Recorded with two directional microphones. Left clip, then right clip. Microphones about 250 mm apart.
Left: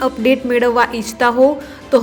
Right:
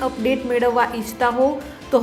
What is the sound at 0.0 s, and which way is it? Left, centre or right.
A woman's voice, centre.